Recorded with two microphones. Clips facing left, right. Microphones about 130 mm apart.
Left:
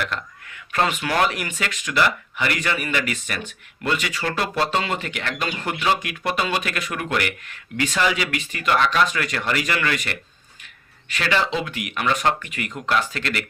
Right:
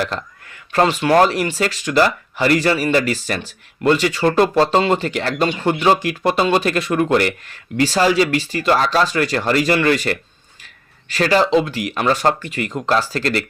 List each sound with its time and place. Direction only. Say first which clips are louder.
0.0 s speech: right 5 dB; 35° right (ahead or behind)